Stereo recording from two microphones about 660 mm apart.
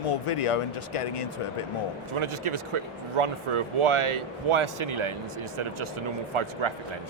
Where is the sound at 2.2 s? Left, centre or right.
Right.